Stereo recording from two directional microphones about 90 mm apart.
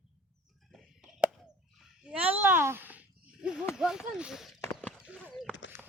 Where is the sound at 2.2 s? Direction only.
25° right (ahead or behind).